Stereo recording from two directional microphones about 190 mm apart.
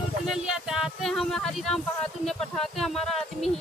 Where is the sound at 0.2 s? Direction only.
Centre (ahead or behind).